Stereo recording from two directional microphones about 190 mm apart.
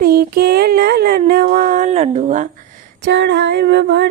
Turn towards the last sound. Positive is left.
turn(degrees=-60)  # may be behind; listen again after turning